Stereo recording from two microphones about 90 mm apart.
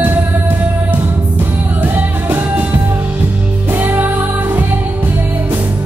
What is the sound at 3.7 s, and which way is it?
Music, 20° right (ahead or behind).